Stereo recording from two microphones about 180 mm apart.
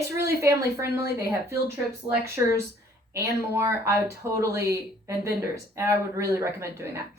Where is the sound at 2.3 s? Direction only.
15° right (ahead or behind).